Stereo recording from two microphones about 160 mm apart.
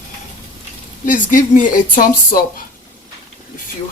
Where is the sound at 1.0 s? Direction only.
55° left (ahead or behind).